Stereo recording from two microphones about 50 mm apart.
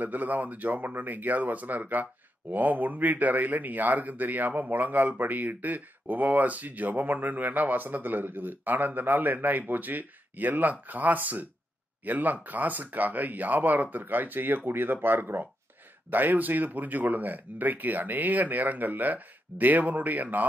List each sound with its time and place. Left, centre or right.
0.0 s speech: right